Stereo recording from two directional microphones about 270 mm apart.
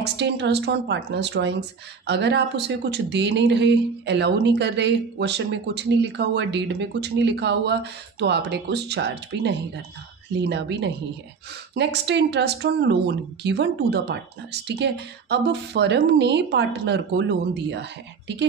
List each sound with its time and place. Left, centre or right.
0.0 s speech: right